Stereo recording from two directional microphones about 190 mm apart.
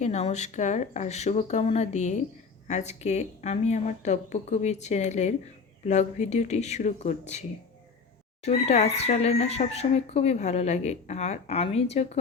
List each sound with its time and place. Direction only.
0.0 s speech: 35° left (ahead or behind)